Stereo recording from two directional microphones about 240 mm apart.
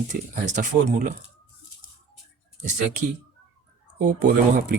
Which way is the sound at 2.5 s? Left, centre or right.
Right.